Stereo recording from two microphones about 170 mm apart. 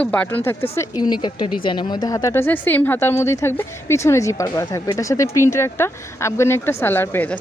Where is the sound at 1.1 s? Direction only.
30° left (ahead or behind); by 7.3 s 10° left (ahead or behind).